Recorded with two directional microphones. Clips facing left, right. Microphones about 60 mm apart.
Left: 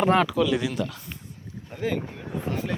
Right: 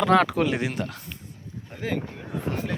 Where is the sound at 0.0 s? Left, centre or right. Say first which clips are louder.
Right 1 dB; right.